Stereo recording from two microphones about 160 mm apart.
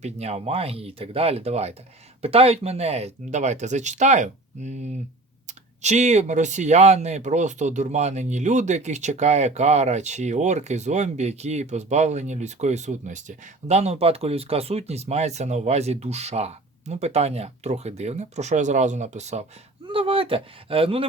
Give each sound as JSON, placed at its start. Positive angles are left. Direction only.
{"t": 0.0, "sound": "speech", "side_deg": -40}
{"t": 19.9, "sound": "speech", "side_deg": -35}